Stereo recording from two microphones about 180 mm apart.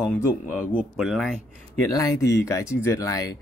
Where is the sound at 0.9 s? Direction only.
Centre (ahead or behind).